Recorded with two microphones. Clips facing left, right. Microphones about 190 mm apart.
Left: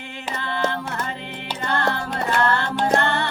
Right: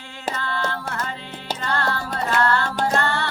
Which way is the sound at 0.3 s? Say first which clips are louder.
Left 4 dB; 20° left (ahead or behind).